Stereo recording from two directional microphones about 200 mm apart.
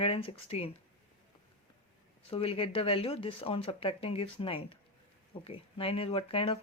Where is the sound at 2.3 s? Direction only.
30° left (ahead or behind).